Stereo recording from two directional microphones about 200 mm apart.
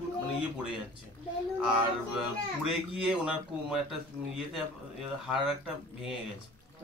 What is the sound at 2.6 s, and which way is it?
Speech, 5° right (ahead or behind).